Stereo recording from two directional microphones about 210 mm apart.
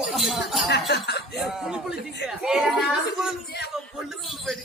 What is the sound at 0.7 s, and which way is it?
Speech, 55° left (ahead or behind).